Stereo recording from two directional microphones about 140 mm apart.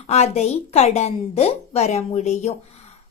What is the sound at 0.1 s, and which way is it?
A woman's voice, 50° left (ahead or behind).